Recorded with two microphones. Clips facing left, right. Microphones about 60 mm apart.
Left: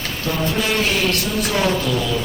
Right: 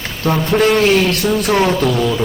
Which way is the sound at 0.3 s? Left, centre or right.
Right.